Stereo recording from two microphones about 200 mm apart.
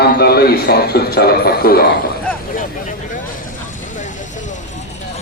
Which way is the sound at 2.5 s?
40° left (ahead or behind).